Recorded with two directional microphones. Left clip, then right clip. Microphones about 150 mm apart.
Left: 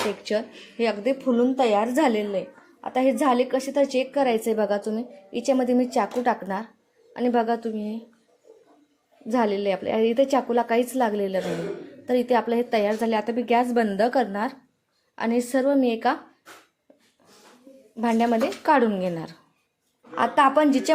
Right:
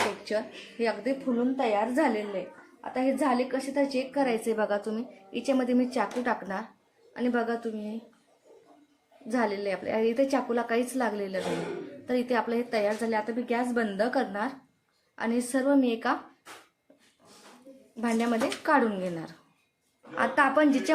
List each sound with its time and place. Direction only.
0.3 s speech: 55° left (ahead or behind)
1.2 s a woman's voice: 90° left; by 7.9 s 45° left (ahead or behind)
9.3 s a woman's voice: 45° left (ahead or behind)
18.0 s a woman's voice: 50° left (ahead or behind)